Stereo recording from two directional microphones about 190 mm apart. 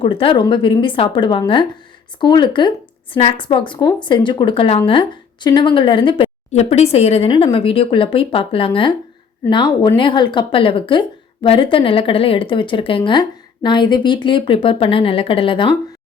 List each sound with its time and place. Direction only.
0.0 s speech: 25° left (ahead or behind)